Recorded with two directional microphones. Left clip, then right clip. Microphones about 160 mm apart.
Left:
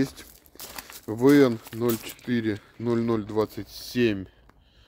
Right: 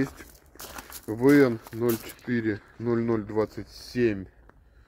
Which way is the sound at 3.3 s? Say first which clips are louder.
Left 1 dB; 45° left (ahead or behind).